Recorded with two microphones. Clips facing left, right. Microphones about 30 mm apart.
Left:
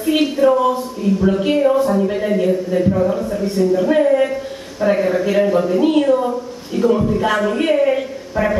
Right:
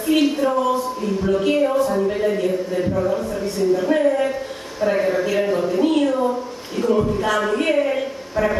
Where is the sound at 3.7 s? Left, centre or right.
Centre.